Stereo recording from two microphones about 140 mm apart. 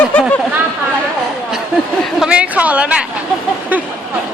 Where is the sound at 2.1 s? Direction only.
5° right (ahead or behind).